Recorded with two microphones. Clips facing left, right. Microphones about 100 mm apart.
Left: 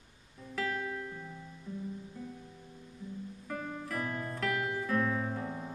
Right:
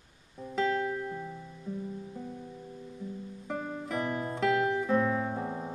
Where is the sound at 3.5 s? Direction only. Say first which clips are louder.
Right 4 dB; 20° right (ahead or behind).